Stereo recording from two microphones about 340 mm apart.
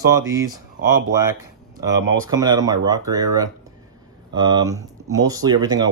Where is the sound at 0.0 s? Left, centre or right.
Centre.